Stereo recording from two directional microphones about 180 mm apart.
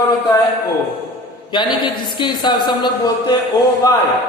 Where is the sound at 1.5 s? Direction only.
25° left (ahead or behind).